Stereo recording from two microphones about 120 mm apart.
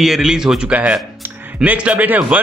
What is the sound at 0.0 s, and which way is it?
A man's voice, 5° right (ahead or behind).